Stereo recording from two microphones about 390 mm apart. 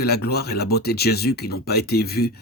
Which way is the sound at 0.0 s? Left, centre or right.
Left.